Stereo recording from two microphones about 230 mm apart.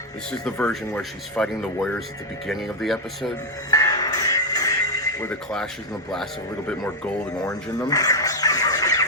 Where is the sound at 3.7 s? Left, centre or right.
Centre.